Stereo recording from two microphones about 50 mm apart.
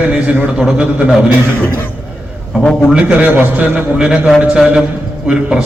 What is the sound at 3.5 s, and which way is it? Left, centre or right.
Speech, right.